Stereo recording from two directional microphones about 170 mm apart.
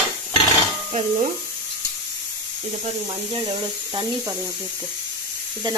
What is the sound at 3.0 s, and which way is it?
Speech, 25° right (ahead or behind).